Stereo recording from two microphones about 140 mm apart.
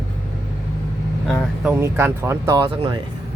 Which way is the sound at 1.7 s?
20° right (ahead or behind).